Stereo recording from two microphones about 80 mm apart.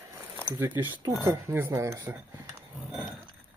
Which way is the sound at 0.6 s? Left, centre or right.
Right.